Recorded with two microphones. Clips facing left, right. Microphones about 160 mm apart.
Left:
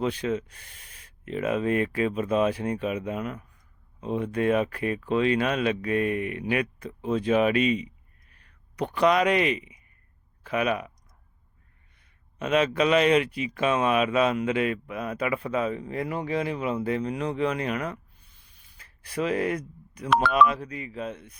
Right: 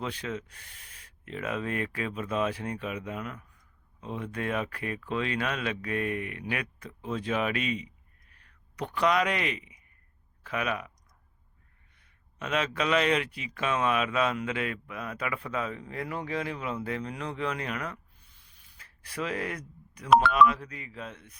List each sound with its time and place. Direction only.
0.0 s speech: 20° left (ahead or behind)
12.4 s speech: 20° left (ahead or behind)
19.0 s speech: 20° left (ahead or behind)